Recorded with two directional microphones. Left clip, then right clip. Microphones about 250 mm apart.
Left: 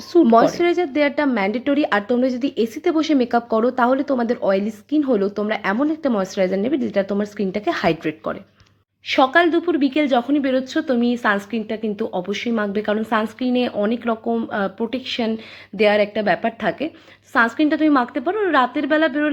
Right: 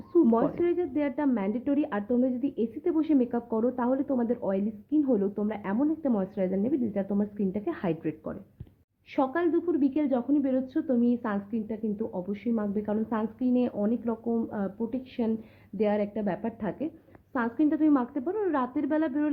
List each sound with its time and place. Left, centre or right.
0.1 s a woman's voice: centre